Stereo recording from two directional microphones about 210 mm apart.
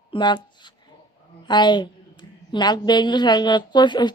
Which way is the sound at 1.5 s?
20° left (ahead or behind).